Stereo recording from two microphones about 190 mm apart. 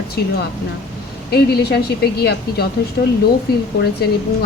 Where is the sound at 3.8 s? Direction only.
55° left (ahead or behind).